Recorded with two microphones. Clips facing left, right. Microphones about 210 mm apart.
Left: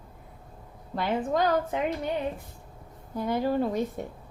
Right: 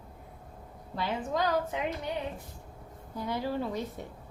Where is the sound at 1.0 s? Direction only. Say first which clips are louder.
Left 5 dB; 55° left (ahead or behind).